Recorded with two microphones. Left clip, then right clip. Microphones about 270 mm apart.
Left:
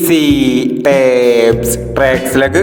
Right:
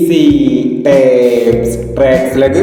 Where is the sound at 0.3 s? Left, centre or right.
Left.